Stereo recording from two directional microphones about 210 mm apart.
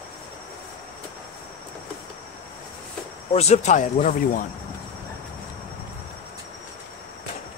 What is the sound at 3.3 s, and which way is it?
Speech, 30° left (ahead or behind).